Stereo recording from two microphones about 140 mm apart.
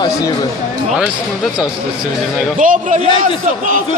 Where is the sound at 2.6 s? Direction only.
65° right (ahead or behind).